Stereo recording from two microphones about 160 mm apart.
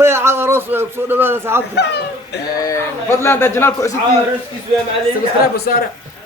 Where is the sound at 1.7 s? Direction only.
90° left.